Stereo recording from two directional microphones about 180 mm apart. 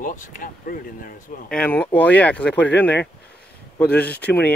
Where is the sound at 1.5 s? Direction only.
10° left (ahead or behind).